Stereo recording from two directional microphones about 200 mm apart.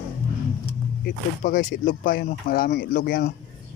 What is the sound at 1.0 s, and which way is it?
Speech, 40° left (ahead or behind).